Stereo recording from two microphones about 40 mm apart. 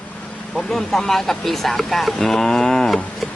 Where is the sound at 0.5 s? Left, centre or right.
Centre.